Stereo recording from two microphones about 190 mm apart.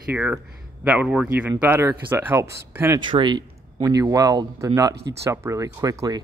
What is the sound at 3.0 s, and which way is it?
Speech, 25° right (ahead or behind).